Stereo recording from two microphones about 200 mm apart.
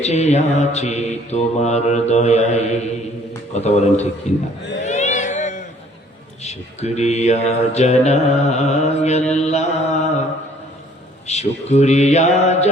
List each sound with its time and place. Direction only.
0.0 s mantra: 35° left (ahead or behind)
4.8 s a sound: 35° left (ahead or behind)
6.4 s mantra: 35° left (ahead or behind)
11.3 s mantra: 35° left (ahead or behind)